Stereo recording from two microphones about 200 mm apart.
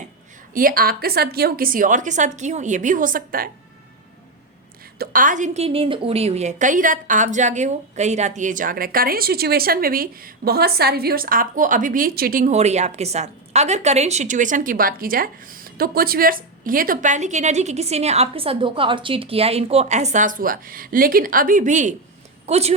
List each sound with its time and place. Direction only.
0.5 s a woman's voice: 45° right (ahead or behind)
4.9 s a woman's voice: 40° right (ahead or behind)